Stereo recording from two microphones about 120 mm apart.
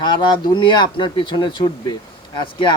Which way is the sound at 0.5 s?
40° left (ahead or behind).